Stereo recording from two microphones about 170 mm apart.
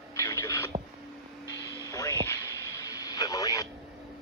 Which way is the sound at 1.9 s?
20° left (ahead or behind).